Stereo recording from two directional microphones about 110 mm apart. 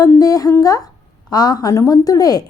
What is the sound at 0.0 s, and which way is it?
A woman's voice, 30° left (ahead or behind).